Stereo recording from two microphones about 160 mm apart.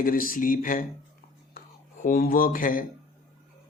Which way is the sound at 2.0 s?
60° left (ahead or behind).